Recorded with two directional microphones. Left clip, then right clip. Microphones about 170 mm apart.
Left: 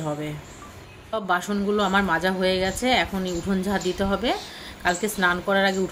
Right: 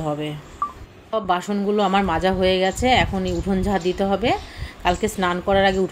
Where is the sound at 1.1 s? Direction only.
10° right (ahead or behind).